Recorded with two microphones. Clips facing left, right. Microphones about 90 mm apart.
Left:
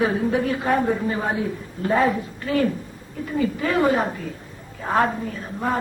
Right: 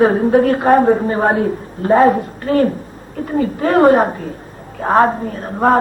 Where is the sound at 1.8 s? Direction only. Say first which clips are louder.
Right 9 dB; 40° right (ahead or behind).